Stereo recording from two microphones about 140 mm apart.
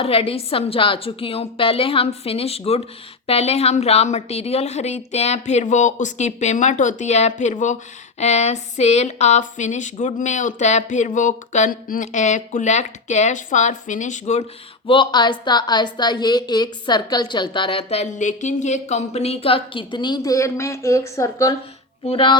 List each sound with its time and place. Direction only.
0.0 s a woman's voice: 40° left (ahead or behind); by 14.4 s 55° left (ahead or behind)
14.8 s a woman's voice: 35° left (ahead or behind)
22.0 s a woman's voice: 40° left (ahead or behind)